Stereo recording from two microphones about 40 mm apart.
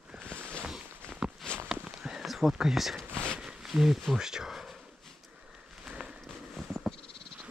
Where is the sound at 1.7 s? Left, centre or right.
Centre.